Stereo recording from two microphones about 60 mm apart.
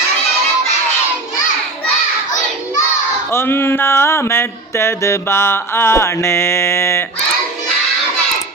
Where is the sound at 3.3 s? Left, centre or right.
Left.